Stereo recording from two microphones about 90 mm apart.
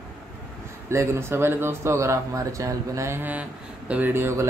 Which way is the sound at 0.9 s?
30° right (ahead or behind).